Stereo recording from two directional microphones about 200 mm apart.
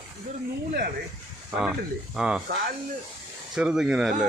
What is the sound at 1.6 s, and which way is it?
Speech, 5° right (ahead or behind).